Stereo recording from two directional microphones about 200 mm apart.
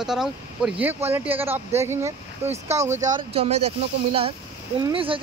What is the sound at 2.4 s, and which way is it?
Speech, 30° right (ahead or behind).